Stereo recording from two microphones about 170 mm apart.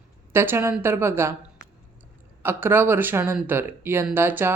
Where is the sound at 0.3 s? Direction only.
15° right (ahead or behind).